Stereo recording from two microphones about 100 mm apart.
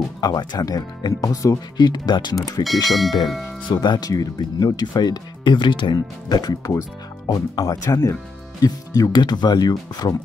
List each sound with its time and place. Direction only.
0.2 s speech: 45° left (ahead or behind)
1.9 s speech: 45° left (ahead or behind)
2.6 s speech: centre (ahead or behind)
3.6 s speech: 50° left (ahead or behind)